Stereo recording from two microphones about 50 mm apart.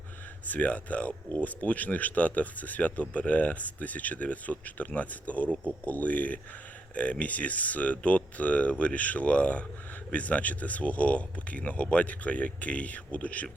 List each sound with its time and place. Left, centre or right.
0.4 s speech: left